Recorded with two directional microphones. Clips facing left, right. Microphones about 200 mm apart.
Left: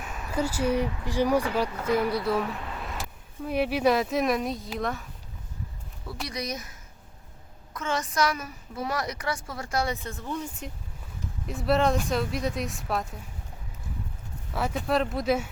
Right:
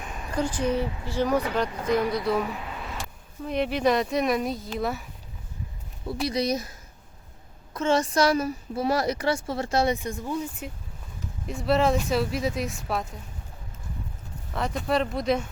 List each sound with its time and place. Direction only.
0.0 s speech: 5° left (ahead or behind)
6.2 s a woman's voice: 30° right (ahead or behind); by 13.1 s centre (ahead or behind)
14.5 s speech: 5° left (ahead or behind)